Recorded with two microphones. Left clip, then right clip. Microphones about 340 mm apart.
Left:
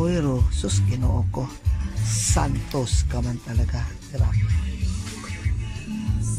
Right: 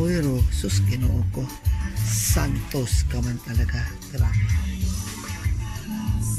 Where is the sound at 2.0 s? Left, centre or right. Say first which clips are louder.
Left 2 dB; centre.